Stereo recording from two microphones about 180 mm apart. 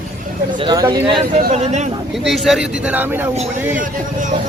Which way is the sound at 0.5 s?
25° right (ahead or behind).